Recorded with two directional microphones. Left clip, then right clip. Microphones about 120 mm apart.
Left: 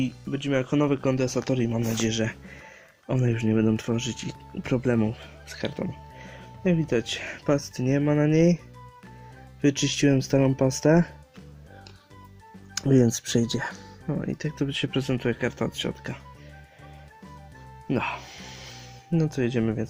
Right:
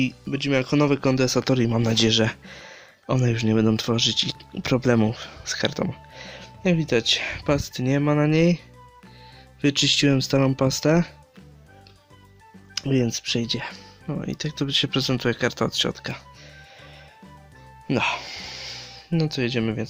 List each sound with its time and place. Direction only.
0.0 s speech: 35° right (ahead or behind); by 2.4 s 50° right (ahead or behind)
2.5 s music: 35° right (ahead or behind)
3.5 s speech: 35° right (ahead or behind)
4.5 s speech: 25° right (ahead or behind)
4.9 s speech: 40° right (ahead or behind); by 11.1 s 10° right (ahead or behind)
12.7 s speech: 25° left (ahead or behind)
14.1 s speech: 10° right (ahead or behind)
14.8 s speech: 25° right (ahead or behind)
17.8 s music: 40° right (ahead or behind)
19.1 s speech: 15° right (ahead or behind)